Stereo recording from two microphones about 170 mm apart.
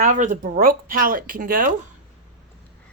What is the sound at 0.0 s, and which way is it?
Speech, 50° right (ahead or behind).